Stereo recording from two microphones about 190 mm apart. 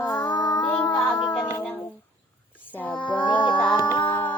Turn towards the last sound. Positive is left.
turn(degrees=10)  # may be behind; listen again after turning